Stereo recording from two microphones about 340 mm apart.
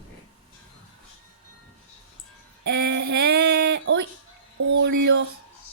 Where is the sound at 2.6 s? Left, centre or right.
Right.